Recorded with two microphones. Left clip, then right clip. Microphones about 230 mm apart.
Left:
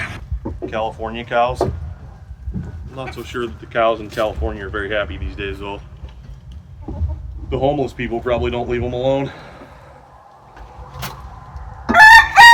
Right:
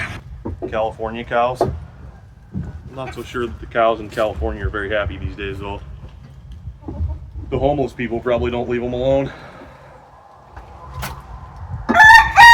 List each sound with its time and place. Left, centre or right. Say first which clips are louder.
0.6 s speech: right 1 dB; centre
2.9 s speech: even; centre
7.5 s speech: even; centre
11.9 s chicken: left 1 dB; left